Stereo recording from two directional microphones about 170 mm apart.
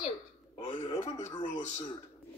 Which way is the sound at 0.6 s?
25° left (ahead or behind).